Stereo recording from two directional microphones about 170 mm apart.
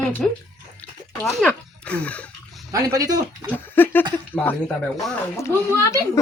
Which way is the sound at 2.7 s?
20° right (ahead or behind).